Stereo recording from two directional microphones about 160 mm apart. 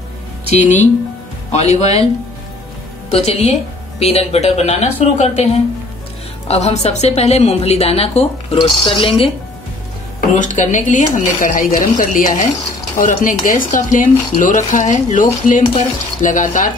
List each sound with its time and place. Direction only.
1.5 s speech: 45° left (ahead or behind)
3.1 s a woman's voice: 40° left (ahead or behind)
10.4 s speech: 50° left (ahead or behind)